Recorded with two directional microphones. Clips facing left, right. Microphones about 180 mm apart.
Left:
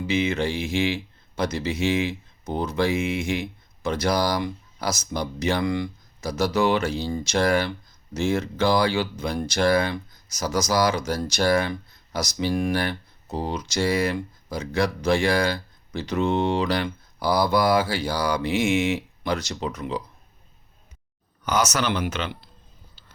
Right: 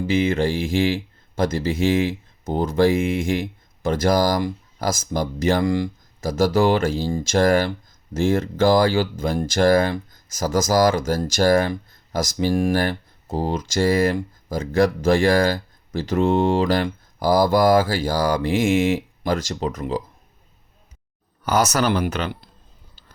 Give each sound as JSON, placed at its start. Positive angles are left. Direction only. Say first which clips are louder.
{"t": 0.1, "sound": "speech", "louder": "right 4 dB", "side_deg": -50}
{"t": 21.6, "sound": "speech", "louder": "right 4 dB", "side_deg": -50}